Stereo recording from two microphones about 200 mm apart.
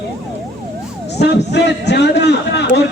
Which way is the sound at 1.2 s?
60° left (ahead or behind).